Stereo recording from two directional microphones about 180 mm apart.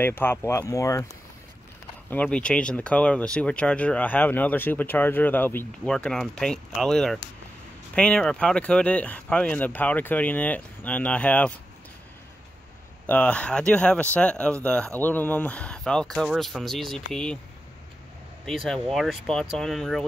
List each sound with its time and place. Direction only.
0.0 s speech: 10° left (ahead or behind)
2.0 s speech: 10° left (ahead or behind)
13.0 s speech: 10° left (ahead or behind)
18.4 s speech: centre (ahead or behind)